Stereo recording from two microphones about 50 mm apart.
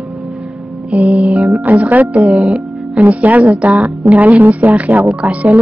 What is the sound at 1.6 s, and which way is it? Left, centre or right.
A woman's voice, right.